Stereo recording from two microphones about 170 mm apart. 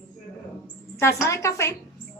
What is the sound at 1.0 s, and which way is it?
Speech, 15° left (ahead or behind).